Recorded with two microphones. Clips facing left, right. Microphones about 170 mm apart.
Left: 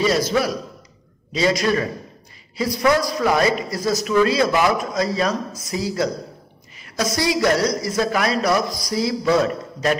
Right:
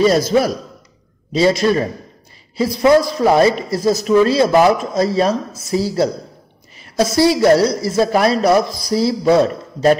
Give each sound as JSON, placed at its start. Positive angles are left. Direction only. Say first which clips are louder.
{"t": 0.3, "sound": "speech", "louder": "right 5 dB", "side_deg": -25}